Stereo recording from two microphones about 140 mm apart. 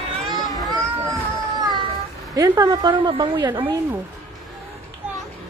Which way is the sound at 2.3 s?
25° right (ahead or behind).